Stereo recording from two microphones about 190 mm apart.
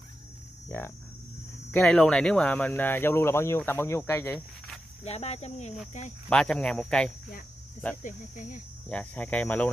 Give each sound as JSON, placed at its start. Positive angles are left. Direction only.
{"t": 0.7, "sound": "cricket", "side_deg": 10}
{"t": 1.7, "sound": "speech", "side_deg": 5}
{"t": 5.0, "sound": "speech", "side_deg": 35}
{"t": 6.3, "sound": "speech", "side_deg": 5}
{"t": 8.0, "sound": "speech", "side_deg": 45}
{"t": 8.8, "sound": "speech", "side_deg": 5}